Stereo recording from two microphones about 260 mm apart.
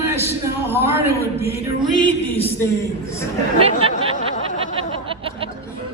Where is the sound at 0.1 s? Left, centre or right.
Centre.